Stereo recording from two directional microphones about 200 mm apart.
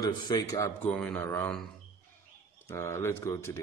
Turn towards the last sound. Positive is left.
turn(degrees=15)  # may be behind; listen again after turning